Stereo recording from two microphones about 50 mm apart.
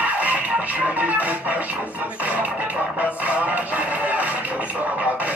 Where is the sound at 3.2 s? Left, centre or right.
Right.